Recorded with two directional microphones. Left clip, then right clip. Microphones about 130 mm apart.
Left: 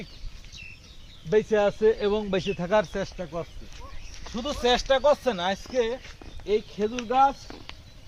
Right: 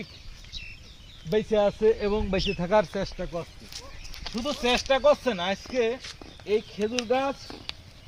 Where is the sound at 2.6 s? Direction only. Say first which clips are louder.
Right 1 dB; 25° right (ahead or behind).